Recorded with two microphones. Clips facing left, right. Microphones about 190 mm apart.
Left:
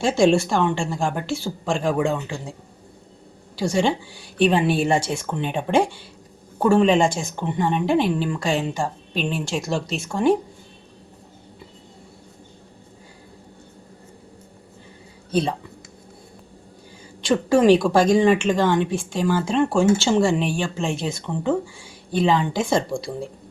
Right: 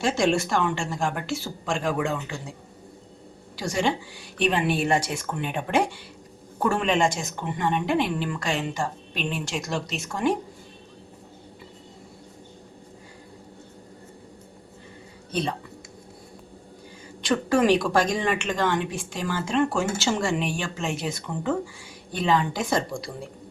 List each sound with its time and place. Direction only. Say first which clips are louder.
0.0 s speech: left 5 dB; 30° left (ahead or behind)
3.5 s speech: left 5 dB; 30° left (ahead or behind)
15.3 s speech: left 6 dB; 30° left (ahead or behind)
17.2 s speech: left 5 dB; 30° left (ahead or behind)